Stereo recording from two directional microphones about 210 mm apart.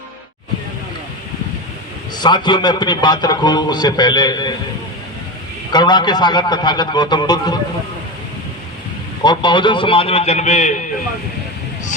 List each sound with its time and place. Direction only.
2.1 s a man's voice: 20° left (ahead or behind)
5.7 s a man's voice: 20° left (ahead or behind)
9.2 s a man's voice: 20° left (ahead or behind)